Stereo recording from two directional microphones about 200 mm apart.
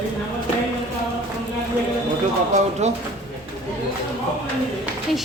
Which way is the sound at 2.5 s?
35° right (ahead or behind).